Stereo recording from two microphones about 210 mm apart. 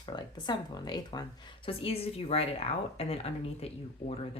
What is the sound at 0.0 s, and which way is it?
Speech, 20° left (ahead or behind).